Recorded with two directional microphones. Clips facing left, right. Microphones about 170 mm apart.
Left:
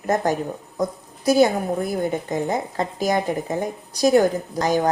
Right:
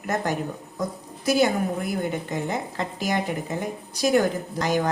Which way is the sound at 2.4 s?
40° left (ahead or behind).